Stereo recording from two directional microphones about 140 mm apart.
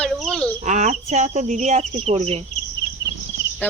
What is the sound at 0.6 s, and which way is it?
Speech, 60° right (ahead or behind).